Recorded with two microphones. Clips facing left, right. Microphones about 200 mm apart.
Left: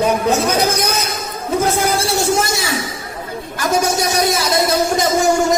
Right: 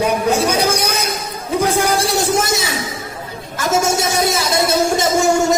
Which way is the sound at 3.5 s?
25° right (ahead or behind).